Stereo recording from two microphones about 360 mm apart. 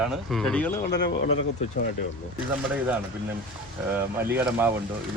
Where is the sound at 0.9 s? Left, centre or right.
Left.